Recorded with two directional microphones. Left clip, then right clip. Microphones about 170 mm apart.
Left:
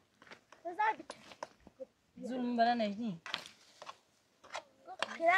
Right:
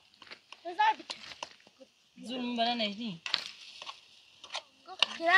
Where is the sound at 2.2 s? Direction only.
5° right (ahead or behind).